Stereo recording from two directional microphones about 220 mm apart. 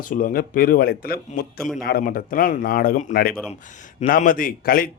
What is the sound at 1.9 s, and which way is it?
Speech, 40° left (ahead or behind).